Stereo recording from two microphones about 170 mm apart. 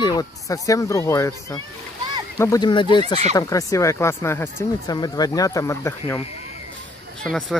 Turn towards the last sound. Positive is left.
turn(degrees=0)  # may be behind; listen again after turning